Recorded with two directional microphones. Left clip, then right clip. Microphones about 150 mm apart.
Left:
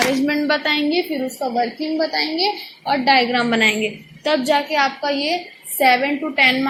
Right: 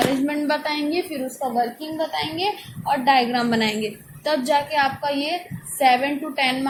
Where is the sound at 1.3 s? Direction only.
25° left (ahead or behind).